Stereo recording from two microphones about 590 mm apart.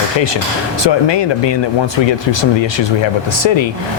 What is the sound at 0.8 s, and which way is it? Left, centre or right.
Speech, left.